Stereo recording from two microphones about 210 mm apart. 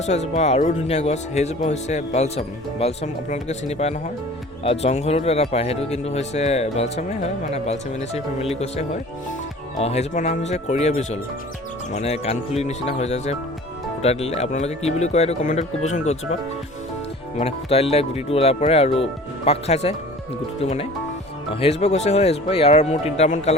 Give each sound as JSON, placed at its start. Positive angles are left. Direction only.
{"t": 0.0, "sound": "speech", "side_deg": 30}
{"t": 17.3, "sound": "speech", "side_deg": 30}